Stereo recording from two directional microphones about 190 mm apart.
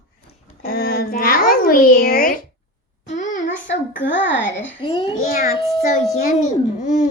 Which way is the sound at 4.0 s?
75° left (ahead or behind).